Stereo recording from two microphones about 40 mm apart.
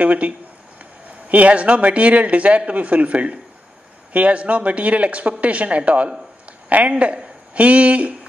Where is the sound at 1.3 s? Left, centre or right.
Right.